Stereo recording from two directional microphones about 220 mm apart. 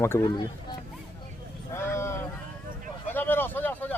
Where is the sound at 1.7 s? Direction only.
10° left (ahead or behind).